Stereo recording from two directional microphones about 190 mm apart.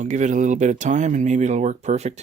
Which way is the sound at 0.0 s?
40° right (ahead or behind).